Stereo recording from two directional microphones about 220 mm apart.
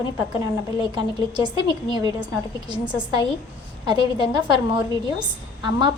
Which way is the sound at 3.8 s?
20° right (ahead or behind).